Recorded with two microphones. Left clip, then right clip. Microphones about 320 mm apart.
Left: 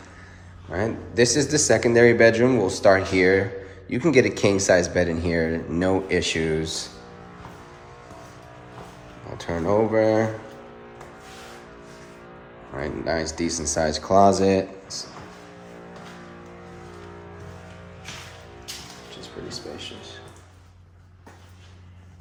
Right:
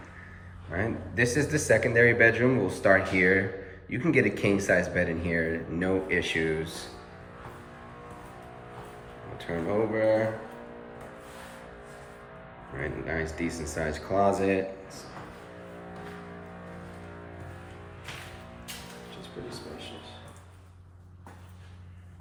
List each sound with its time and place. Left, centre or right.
0.7 s speech: centre
9.5 s speech: left
12.8 s speech: centre